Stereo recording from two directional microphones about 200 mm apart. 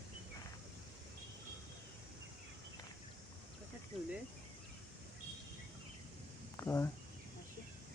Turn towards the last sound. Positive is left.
turn(degrees=15)  # may be behind; listen again after turning